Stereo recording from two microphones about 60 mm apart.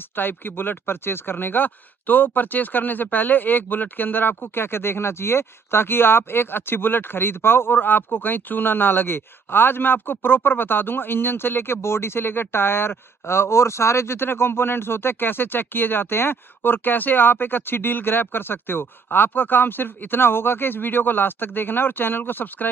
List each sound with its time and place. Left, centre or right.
0.1 s speech: left